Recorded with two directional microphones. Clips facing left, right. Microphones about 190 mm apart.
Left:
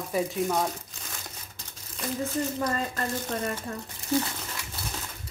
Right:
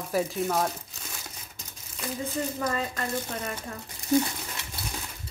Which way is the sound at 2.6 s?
40° left (ahead or behind).